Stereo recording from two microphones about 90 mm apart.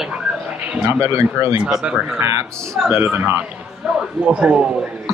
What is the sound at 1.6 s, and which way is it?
Speech, 10° right (ahead or behind).